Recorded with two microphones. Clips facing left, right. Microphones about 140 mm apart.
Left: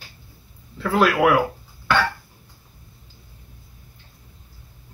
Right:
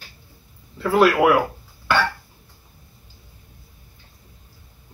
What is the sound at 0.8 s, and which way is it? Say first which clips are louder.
Throat clearing: right 2 dB; 5° right (ahead or behind).